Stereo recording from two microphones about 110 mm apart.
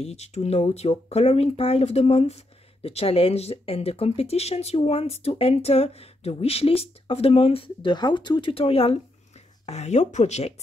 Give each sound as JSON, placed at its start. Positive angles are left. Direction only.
{"t": 0.0, "sound": "speech", "side_deg": 75}
{"t": 9.7, "sound": "speech", "side_deg": 85}